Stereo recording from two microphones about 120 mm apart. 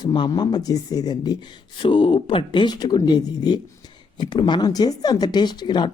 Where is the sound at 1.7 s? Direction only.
45° left (ahead or behind).